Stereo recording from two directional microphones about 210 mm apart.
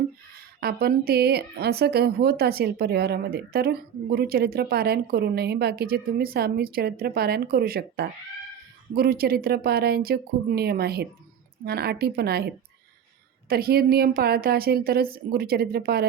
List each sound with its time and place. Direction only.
0.6 s a woman's voice: 45° right (ahead or behind)